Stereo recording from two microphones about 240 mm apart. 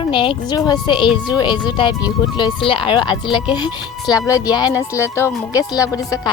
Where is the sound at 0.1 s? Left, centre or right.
Centre.